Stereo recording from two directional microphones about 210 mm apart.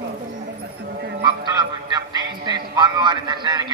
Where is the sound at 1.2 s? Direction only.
20° right (ahead or behind).